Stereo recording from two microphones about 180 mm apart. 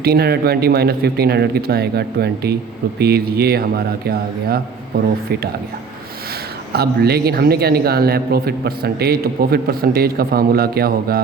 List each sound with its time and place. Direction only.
0.0 s a man's voice: 60° right (ahead or behind)
6.7 s a man's voice: 60° right (ahead or behind)